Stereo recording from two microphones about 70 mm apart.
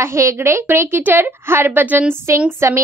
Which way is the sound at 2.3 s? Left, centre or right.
Right.